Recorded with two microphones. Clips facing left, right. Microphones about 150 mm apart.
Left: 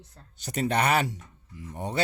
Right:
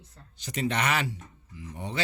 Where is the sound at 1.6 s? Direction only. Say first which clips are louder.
Left 3 dB; 50° left (ahead or behind).